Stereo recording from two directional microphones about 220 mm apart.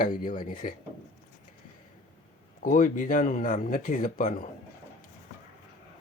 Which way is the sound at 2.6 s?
35° left (ahead or behind).